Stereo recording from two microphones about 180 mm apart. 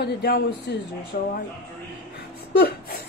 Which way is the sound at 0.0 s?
65° left (ahead or behind).